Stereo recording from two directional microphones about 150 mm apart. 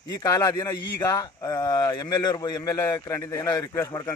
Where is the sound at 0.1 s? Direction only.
25° left (ahead or behind).